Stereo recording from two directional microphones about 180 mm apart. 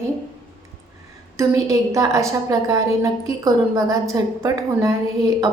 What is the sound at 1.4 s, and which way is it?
A woman's voice, 15° right (ahead or behind).